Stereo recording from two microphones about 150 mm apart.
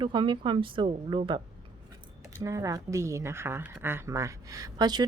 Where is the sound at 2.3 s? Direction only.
20° right (ahead or behind).